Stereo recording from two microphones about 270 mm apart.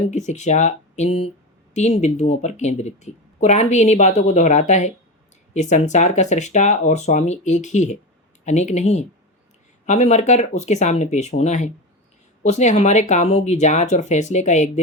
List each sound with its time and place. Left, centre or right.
0.0 s speech: left